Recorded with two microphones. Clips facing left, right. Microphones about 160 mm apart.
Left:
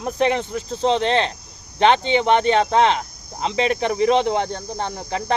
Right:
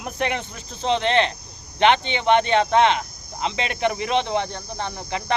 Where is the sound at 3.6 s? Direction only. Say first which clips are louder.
Left 6 dB; 35° left (ahead or behind).